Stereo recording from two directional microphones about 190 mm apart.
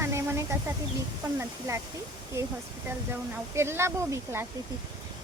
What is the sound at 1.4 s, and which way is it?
Speech, 15° right (ahead or behind).